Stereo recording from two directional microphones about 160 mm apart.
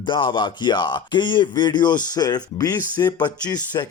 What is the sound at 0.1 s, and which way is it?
Speech, 30° left (ahead or behind).